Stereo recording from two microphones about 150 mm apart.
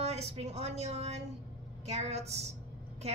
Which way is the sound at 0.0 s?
45° right (ahead or behind).